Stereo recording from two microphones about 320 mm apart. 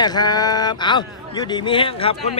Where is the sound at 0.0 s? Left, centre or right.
Centre.